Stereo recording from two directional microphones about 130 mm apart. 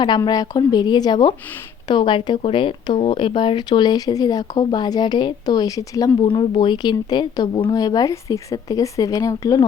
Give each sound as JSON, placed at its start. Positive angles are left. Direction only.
{"t": 0.3, "sound": "speech", "side_deg": 30}
{"t": 6.2, "sound": "speech", "side_deg": 40}